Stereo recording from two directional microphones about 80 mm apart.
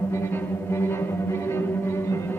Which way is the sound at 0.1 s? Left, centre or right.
Left.